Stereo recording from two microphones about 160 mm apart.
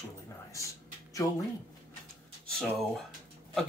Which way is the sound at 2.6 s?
Centre (ahead or behind).